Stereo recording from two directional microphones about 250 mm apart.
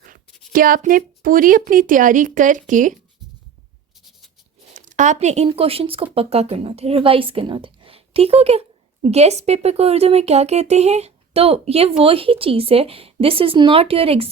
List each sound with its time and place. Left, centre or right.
0.5 s a woman's voice: right
4.7 s speech: right